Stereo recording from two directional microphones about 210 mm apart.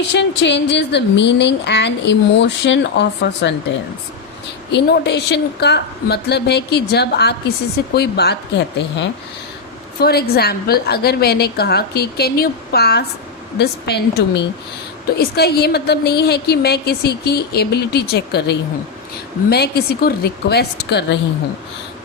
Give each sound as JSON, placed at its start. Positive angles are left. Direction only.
{"t": 0.1, "sound": "speech", "side_deg": 55}
{"t": 4.7, "sound": "a woman's voice", "side_deg": 55}